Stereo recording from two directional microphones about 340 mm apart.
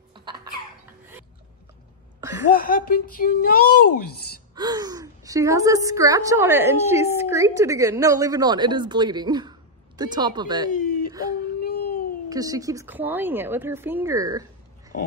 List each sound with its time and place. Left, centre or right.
0.1 s a sound: centre
2.1 s a sound: centre
2.5 s speech: left
4.6 s gasp: centre
5.9 s a woman's voice: centre
11.1 s whimper: centre
11.4 s baby cry: left
12.3 s a woman's voice: centre